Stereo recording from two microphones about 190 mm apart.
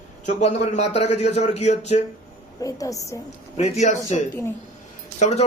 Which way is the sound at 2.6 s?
15° left (ahead or behind).